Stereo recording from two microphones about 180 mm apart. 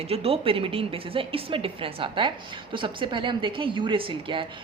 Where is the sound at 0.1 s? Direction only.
35° right (ahead or behind).